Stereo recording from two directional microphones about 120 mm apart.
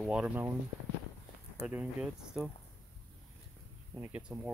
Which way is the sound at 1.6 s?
5° right (ahead or behind).